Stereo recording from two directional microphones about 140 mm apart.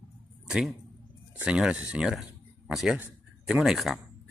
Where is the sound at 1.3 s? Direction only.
5° right (ahead or behind).